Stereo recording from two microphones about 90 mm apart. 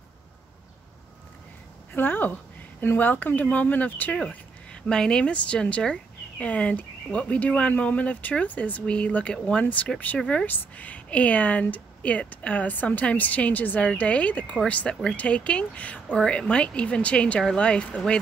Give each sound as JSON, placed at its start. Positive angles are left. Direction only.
{"t": 1.9, "sound": "a woman's voice", "side_deg": 20}